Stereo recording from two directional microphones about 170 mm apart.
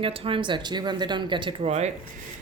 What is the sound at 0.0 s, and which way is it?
Speech, 35° right (ahead or behind).